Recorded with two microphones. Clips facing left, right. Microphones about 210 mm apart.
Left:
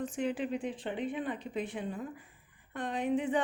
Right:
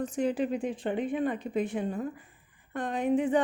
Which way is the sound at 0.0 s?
40° right (ahead or behind).